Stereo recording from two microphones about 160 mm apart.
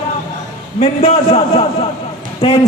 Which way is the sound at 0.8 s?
45° left (ahead or behind).